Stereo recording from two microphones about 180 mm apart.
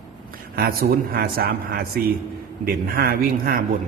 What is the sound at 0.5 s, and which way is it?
A man's voice, 60° right (ahead or behind).